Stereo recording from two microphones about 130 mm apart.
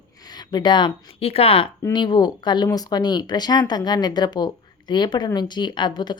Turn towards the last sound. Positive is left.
turn(degrees=35)  # may be behind; listen again after turning